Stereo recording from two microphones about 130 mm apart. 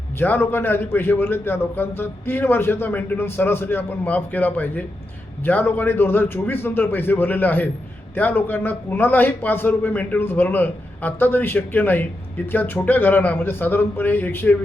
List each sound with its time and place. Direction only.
0.2 s a man's voice: 15° left (ahead or behind)